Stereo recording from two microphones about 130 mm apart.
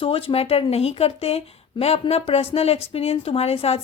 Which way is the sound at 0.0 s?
45° left (ahead or behind).